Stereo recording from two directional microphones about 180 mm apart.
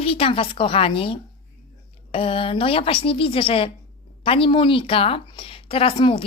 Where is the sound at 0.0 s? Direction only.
30° left (ahead or behind).